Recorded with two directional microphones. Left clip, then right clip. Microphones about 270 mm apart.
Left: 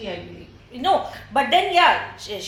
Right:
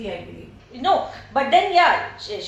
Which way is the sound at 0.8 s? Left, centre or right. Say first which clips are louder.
Even; left.